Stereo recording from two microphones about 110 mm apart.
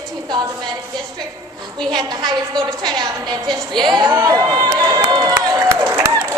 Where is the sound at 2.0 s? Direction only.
40° right (ahead or behind).